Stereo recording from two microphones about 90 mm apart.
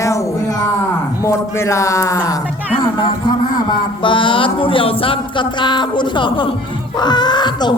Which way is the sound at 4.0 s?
65° left (ahead or behind).